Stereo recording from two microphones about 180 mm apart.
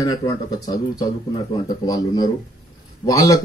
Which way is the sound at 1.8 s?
20° left (ahead or behind).